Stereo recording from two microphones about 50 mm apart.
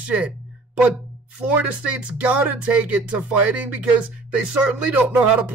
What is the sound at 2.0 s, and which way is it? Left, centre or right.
Speech, right.